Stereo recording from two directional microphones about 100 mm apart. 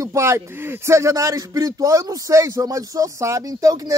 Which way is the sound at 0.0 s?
30° right (ahead or behind).